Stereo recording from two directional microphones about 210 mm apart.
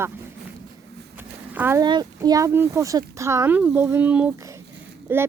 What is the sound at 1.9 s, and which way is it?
Speech, 20° right (ahead or behind).